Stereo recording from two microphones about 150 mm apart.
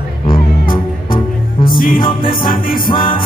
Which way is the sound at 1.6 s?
70° left (ahead or behind).